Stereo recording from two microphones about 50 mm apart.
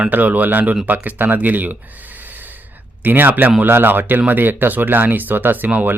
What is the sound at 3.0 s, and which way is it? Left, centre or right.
Speech, right.